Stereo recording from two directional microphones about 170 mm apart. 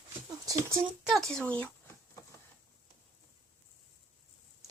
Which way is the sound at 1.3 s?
5° left (ahead or behind).